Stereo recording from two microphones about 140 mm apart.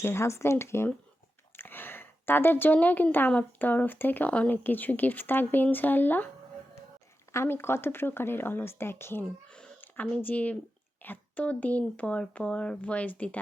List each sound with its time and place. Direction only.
0.0 s a woman's voice: 20° left (ahead or behind)
7.3 s a woman's voice: 20° left (ahead or behind)